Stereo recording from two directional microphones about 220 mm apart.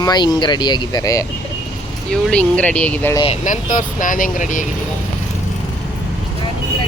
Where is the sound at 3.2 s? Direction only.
35° left (ahead or behind).